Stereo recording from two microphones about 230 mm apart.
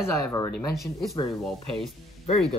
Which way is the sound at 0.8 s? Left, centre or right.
Centre.